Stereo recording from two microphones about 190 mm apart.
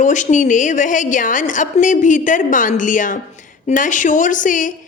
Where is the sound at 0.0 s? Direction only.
40° left (ahead or behind).